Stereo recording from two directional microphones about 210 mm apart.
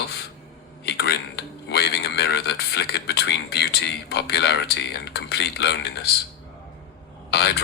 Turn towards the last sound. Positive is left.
turn(degrees=50)  # may be behind; listen again after turning